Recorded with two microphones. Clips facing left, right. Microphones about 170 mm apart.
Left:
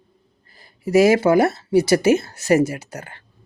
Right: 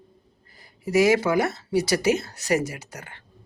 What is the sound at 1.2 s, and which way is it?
Speech, 30° left (ahead or behind).